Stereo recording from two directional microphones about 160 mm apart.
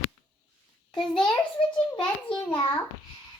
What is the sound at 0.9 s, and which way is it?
Speech, 30° left (ahead or behind).